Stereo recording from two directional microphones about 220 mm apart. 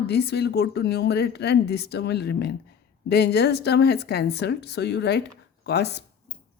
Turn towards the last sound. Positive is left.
turn(degrees=50)  # may be behind; listen again after turning